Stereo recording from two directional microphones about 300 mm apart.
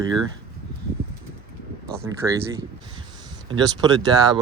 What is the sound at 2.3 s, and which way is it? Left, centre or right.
Speech, centre.